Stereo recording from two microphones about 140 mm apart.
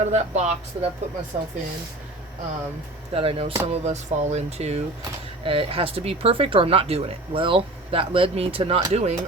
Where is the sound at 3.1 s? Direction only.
40° right (ahead or behind).